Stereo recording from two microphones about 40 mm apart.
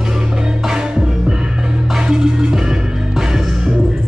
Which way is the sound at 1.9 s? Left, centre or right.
Centre.